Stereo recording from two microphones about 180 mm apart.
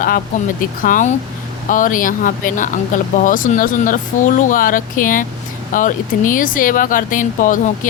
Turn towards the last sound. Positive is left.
turn(degrees=50)  # may be behind; listen again after turning